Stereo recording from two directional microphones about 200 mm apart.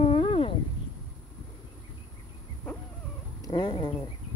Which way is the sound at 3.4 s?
25° left (ahead or behind).